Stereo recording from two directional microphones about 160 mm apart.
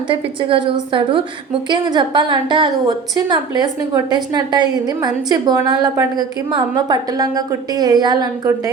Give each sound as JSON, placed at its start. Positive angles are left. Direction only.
{"t": 0.1, "sound": "a woman's voice", "side_deg": -35}